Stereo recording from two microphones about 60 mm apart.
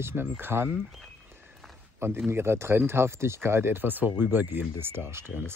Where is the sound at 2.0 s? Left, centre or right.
Right.